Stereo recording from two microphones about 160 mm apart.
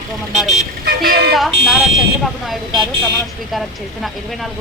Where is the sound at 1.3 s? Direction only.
Centre (ahead or behind).